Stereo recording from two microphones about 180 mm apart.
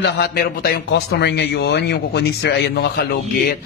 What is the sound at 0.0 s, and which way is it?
A man's voice, 60° left (ahead or behind).